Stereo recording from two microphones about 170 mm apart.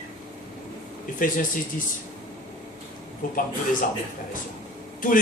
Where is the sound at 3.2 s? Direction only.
55° left (ahead or behind).